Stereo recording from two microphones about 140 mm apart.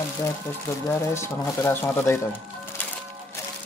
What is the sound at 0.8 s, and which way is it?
Speech, 20° left (ahead or behind).